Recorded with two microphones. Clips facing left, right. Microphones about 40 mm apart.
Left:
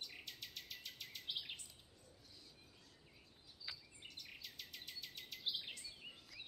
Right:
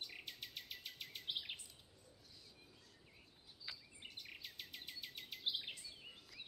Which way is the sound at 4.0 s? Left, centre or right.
Centre.